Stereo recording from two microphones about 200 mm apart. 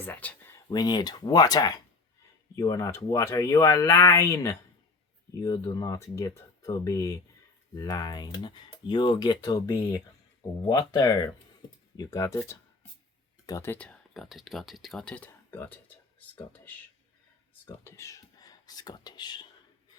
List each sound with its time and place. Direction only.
0.0 s speech: 10° left (ahead or behind)
0.7 s speech: 20° left (ahead or behind)